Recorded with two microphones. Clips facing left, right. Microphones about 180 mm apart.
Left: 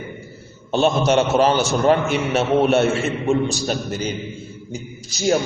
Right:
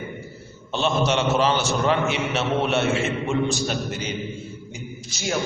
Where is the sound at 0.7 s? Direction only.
45° left (ahead or behind).